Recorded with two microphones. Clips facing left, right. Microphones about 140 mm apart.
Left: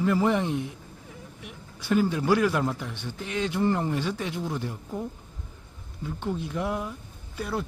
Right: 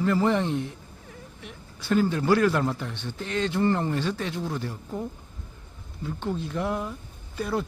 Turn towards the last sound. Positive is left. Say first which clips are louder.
# right 3 dB
turn(degrees=5)  # may be behind; listen again after turning